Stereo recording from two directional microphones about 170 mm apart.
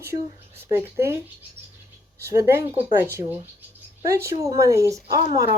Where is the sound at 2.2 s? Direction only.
15° right (ahead or behind).